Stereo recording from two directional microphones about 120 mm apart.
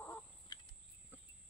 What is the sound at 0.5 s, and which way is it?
Cricket, 40° left (ahead or behind).